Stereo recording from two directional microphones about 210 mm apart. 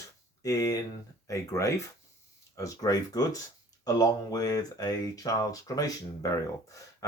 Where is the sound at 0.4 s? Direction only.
15° left (ahead or behind).